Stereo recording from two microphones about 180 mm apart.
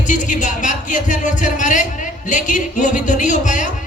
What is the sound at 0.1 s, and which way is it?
Speech, 45° left (ahead or behind).